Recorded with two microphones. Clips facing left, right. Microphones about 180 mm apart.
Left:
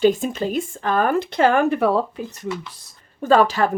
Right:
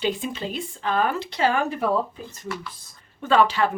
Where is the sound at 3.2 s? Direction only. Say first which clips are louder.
Left 3 dB; 40° left (ahead or behind).